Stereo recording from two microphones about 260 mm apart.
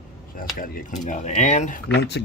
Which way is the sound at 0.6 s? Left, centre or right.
Left.